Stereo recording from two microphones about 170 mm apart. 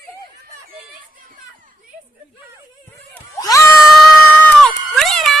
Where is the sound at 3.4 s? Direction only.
20° left (ahead or behind).